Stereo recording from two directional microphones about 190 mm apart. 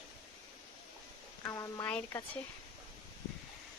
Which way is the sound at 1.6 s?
15° left (ahead or behind).